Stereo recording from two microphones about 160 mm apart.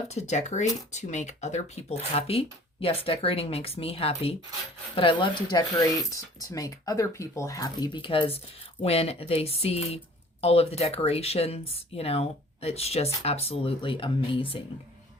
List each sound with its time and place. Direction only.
0.1 s speech: 45° left (ahead or behind)